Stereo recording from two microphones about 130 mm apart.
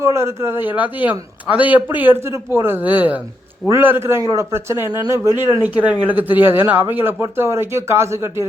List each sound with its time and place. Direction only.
0.0 s a man's voice: 20° right (ahead or behind)